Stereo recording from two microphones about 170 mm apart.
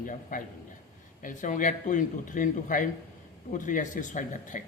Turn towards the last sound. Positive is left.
turn(degrees=50)  # may be behind; listen again after turning